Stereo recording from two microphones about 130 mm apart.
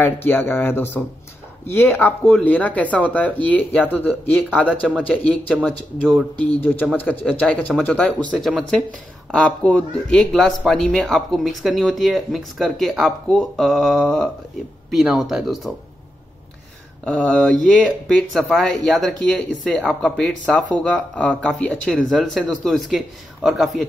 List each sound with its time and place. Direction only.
0.0 s speech: 15° left (ahead or behind)
17.0 s speech: 10° left (ahead or behind)